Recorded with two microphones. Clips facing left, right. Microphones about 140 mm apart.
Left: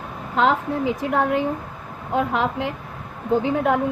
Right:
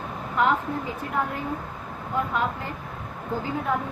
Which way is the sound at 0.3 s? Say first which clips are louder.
Left 4 dB; 90° left.